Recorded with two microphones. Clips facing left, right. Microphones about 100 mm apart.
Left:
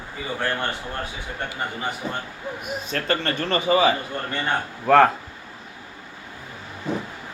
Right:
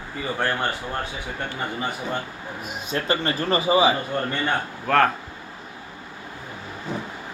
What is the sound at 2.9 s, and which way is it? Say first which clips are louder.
Speech: right 1 dB; 15° right (ahead or behind).